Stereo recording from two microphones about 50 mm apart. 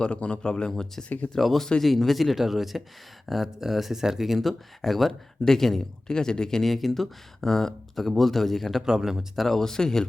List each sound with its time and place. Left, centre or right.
0.0 s speech: left
0.7 s speech: centre
8.8 s speech: centre
9.5 s speech: centre